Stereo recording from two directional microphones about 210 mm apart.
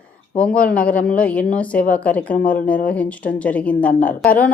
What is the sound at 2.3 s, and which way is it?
Speech, 40° left (ahead or behind).